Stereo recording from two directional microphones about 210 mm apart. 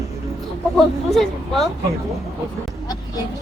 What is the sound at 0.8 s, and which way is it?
Speech, centre (ahead or behind).